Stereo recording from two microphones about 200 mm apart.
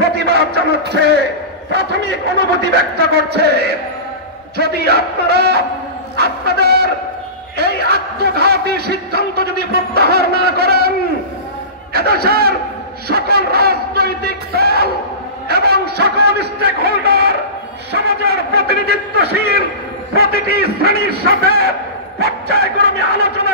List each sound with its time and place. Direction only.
0.0 s a sound: 50° right (ahead or behind)
0.8 s a man's voice: 55° right (ahead or behind)
11.9 s a man's voice: 50° right (ahead or behind)